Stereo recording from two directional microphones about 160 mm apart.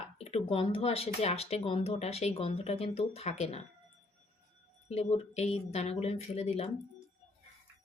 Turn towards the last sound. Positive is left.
turn(degrees=40)  # may be behind; listen again after turning